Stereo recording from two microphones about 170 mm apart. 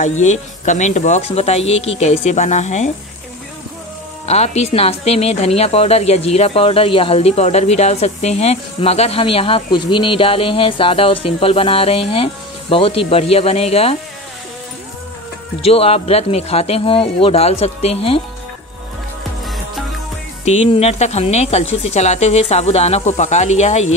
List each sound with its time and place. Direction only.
0.0 s speech: 45° left (ahead or behind)
4.3 s speech: 40° left (ahead or behind)
15.6 s speech: 35° left (ahead or behind)
20.4 s speech: 40° left (ahead or behind)